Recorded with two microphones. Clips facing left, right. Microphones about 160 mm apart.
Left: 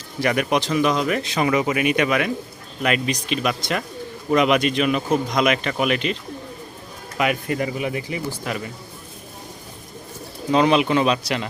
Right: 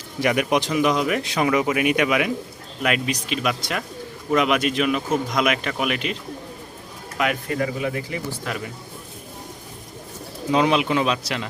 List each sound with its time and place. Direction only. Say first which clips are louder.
0.2 s speech: even; 15° right (ahead or behind)
7.2 s speech: left 2 dB; 5° left (ahead or behind)
7.6 s speech: even; 15° left (ahead or behind)
10.5 s speech: left 2 dB; 5° right (ahead or behind)